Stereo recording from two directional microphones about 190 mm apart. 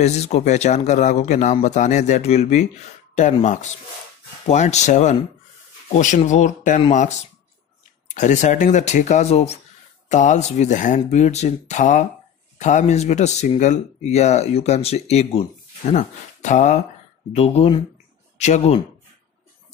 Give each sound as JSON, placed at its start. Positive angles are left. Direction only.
{"t": 0.0, "sound": "speech", "side_deg": 35}
{"t": 4.5, "sound": "speech", "side_deg": 35}